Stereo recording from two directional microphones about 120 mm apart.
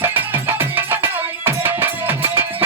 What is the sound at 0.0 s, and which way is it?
Music, 20° right (ahead or behind).